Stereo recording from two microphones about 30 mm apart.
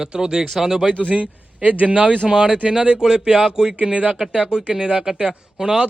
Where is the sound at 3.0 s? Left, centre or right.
Right.